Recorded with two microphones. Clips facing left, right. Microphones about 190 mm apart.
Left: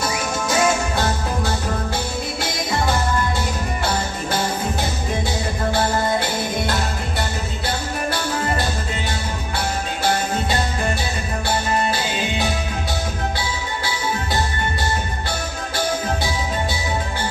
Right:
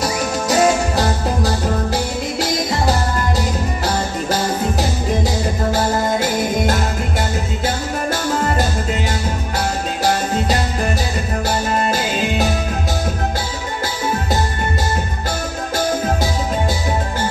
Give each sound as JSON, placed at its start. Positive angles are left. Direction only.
{"t": 0.0, "sound": "music", "side_deg": -35}
{"t": 5.7, "sound": "music", "side_deg": -40}